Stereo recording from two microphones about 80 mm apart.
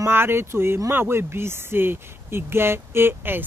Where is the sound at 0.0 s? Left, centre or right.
Right.